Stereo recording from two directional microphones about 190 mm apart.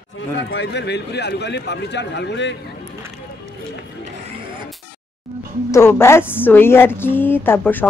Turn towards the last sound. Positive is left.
turn(degrees=10)  # may be behind; listen again after turning